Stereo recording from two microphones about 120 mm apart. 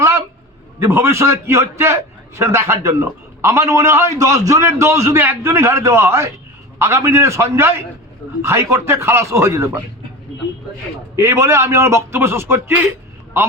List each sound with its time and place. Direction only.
0.8 s a man's voice: 20° right (ahead or behind)
11.2 s a man's voice: 20° right (ahead or behind)